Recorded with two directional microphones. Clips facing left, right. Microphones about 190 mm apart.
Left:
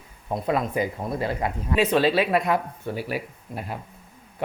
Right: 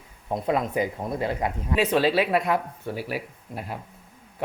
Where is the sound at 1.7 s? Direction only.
5° right (ahead or behind).